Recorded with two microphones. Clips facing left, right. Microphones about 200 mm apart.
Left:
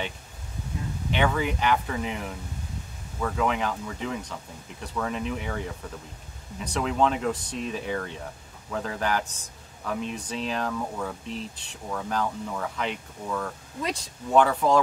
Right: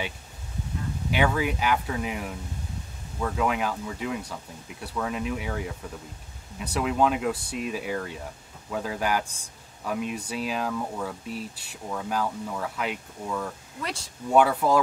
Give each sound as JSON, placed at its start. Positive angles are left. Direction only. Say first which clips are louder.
{"t": 1.1, "sound": "speech", "louder": "right 1 dB", "side_deg": -5}
{"t": 13.7, "sound": "speech", "louder": "left 5 dB", "side_deg": 15}
{"t": 14.3, "sound": "speech", "louder": "even", "side_deg": -10}